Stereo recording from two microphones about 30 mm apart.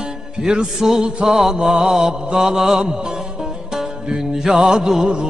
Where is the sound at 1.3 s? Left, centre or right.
Centre.